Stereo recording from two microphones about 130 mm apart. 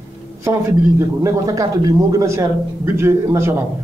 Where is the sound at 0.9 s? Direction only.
25° right (ahead or behind).